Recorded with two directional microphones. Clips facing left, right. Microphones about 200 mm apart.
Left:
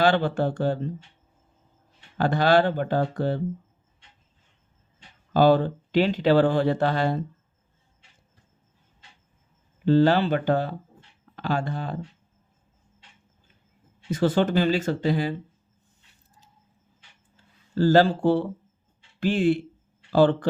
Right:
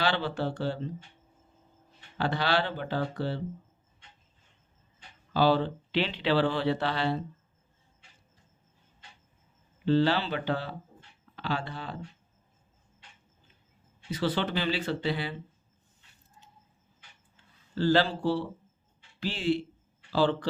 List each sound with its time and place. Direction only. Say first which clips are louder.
0.0 s speech: left 8 dB; 50° left (ahead or behind)
2.1 s speech: left 8 dB; 45° left (ahead or behind)
5.3 s speech: left 6 dB; 50° left (ahead or behind)
9.8 s speech: left 6 dB; 45° left (ahead or behind)
14.1 s speech: left 7 dB; 50° left (ahead or behind)
17.3 s speech: left 7 dB; 45° left (ahead or behind)